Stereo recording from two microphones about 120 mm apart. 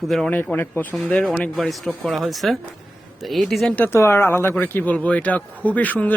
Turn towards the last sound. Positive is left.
turn(degrees=15)  # may be behind; listen again after turning